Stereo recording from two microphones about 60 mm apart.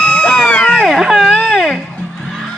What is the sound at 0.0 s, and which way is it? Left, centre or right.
Music, left.